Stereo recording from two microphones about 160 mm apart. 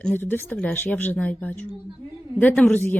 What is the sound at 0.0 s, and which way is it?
Speech, 10° left (ahead or behind).